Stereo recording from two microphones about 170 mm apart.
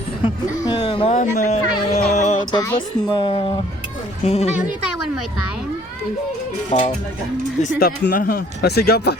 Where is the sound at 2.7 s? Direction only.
30° left (ahead or behind).